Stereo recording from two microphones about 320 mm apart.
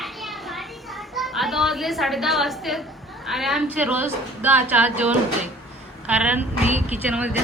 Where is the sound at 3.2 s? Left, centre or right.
Centre.